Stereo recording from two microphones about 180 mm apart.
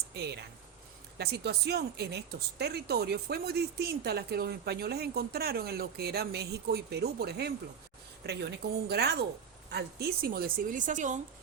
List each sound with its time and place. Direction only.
1.2 s a woman's voice: 65° right (ahead or behind); by 11.2 s 45° right (ahead or behind)